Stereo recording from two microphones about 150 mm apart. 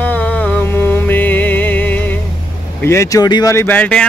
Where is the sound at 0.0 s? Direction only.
10° left (ahead or behind).